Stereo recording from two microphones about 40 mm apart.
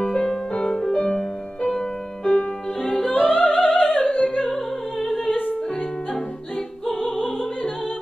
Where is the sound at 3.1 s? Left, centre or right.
Left.